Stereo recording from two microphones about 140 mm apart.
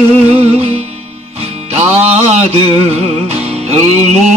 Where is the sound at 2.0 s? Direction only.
50° right (ahead or behind).